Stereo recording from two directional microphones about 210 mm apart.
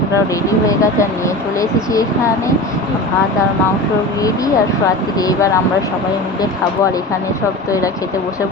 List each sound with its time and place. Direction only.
0.7 s speech: 15° left (ahead or behind)
4.2 s speech: 15° left (ahead or behind)